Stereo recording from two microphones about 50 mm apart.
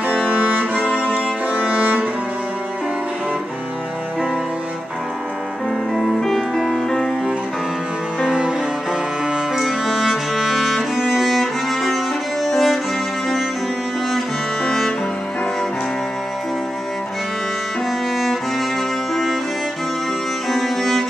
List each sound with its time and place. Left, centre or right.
5.9 s music: centre
8.3 s cello: right
9.6 s music: centre
14.1 s cello: centre
20.4 s music: centre